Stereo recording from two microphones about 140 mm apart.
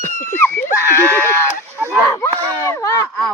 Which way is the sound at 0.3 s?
15° left (ahead or behind).